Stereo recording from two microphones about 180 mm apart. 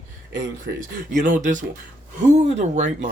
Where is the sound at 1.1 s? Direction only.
45° right (ahead or behind).